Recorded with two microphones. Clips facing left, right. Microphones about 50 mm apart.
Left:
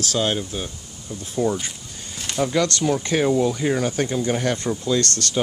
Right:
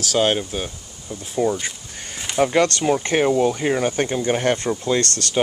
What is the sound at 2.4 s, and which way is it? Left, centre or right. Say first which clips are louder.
Speech: right 3 dB; right.